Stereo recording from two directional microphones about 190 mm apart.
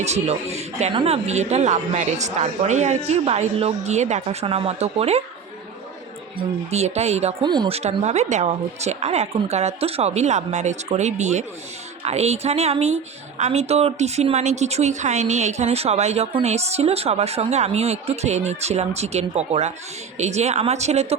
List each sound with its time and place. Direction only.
0.0 s a woman's voice: 35° right (ahead or behind)
6.3 s a woman's voice: 35° right (ahead or behind)
7.4 s a woman's voice: 25° right (ahead or behind)